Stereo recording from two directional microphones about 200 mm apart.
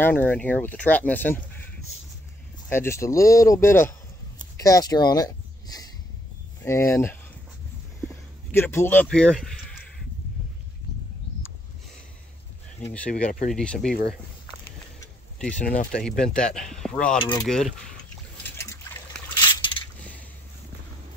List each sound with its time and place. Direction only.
0.0 s speech: 10° left (ahead or behind)
2.7 s speech: 15° left (ahead or behind)
8.5 s speech: 10° left (ahead or behind)
12.9 s speech: 5° left (ahead or behind)
13.2 s speech: 40° left (ahead or behind)
13.5 s speech: centre (ahead or behind)
15.3 s speech: 5° left (ahead or behind)
17.2 s mechanisms: 20° left (ahead or behind)
17.5 s speech: 5° left (ahead or behind)